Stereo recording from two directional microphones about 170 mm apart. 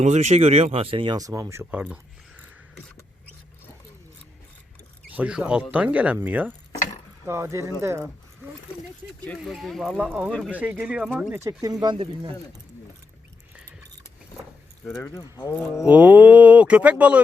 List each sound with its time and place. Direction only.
0.0 s speech: 40° right (ahead or behind); by 2.0 s 10° right (ahead or behind)
5.1 s speech: 10° right (ahead or behind)
9.2 s speech: 5° left (ahead or behind); by 12.3 s 25° right (ahead or behind)
14.8 s speech: 15° left (ahead or behind)
15.9 s speech: 10° right (ahead or behind)